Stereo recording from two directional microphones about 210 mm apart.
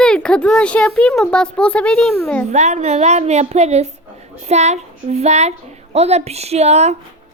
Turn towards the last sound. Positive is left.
turn(degrees=-30)  # may be behind; listen again after turning